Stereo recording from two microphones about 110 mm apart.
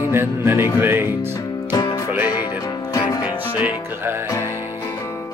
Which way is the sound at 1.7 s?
45° left (ahead or behind).